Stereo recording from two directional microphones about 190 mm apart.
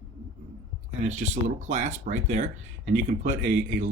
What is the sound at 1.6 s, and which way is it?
Speech, 40° right (ahead or behind).